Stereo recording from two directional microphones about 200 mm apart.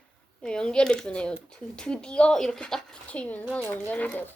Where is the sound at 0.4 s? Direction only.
5° left (ahead or behind).